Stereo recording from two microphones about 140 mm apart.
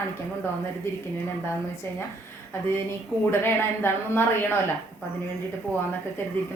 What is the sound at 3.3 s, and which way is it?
A woman's voice, 15° left (ahead or behind).